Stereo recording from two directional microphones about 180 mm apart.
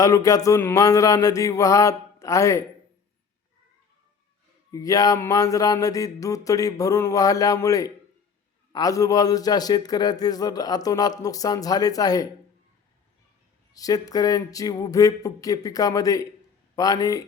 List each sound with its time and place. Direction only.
0.0 s a sound: 20° left (ahead or behind)
4.7 s speech: 20° left (ahead or behind)
13.7 s speech: 20° left (ahead or behind)